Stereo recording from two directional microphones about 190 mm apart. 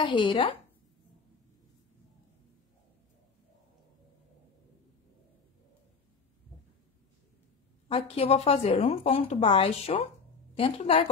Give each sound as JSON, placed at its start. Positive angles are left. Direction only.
{"t": 0.0, "sound": "speech", "side_deg": 25}
{"t": 7.9, "sound": "a woman's voice", "side_deg": 35}